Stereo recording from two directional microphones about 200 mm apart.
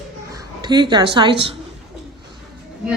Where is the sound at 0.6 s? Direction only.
20° right (ahead or behind).